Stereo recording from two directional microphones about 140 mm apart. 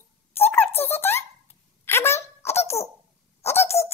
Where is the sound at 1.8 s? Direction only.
20° left (ahead or behind).